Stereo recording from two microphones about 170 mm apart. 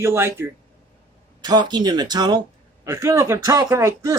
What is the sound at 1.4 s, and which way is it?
Speech, 25° right (ahead or behind).